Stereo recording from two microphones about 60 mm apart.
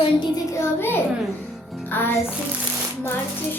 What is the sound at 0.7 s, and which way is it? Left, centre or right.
Speech, left.